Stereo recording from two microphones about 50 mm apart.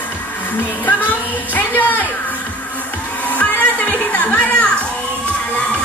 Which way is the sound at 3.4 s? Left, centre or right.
Left.